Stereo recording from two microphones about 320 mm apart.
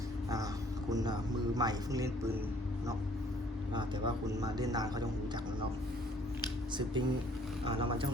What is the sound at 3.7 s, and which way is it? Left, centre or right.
A man's voice, centre.